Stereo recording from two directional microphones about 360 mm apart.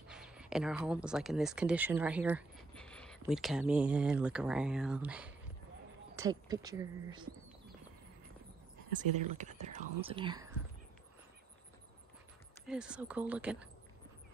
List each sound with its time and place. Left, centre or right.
0.1 s speech: centre
9.2 s speech: centre
12.6 s speech: centre